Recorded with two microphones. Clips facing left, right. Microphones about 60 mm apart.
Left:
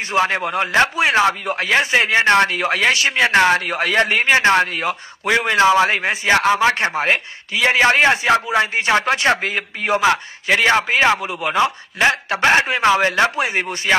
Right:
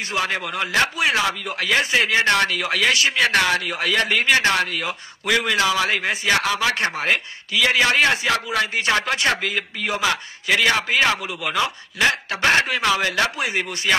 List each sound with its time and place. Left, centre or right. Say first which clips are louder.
0.1 s a man's voice: left 7 dB; left
3.6 s a man's voice: left 4 dB; left